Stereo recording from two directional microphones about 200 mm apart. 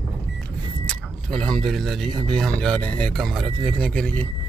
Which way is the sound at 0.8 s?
5° left (ahead or behind).